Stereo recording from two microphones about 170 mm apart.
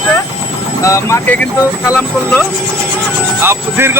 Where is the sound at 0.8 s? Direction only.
15° left (ahead or behind).